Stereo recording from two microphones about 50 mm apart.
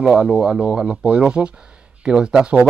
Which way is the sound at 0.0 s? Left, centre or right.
Centre.